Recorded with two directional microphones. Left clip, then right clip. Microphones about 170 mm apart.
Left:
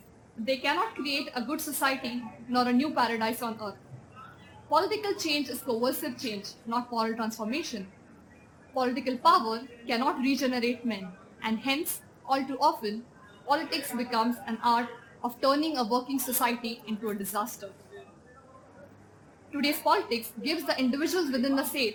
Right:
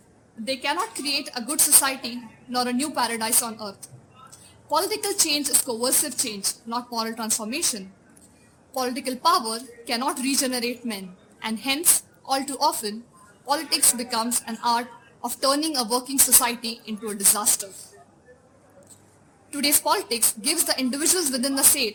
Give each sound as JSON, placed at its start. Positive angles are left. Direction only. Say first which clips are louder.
{"t": 0.4, "sound": "a woman's voice", "louder": "right 2 dB", "side_deg": -50}
{"t": 4.7, "sound": "a woman's voice", "louder": "right 2 dB", "side_deg": -55}
{"t": 19.5, "sound": "a woman's voice", "louder": "right 3 dB", "side_deg": -55}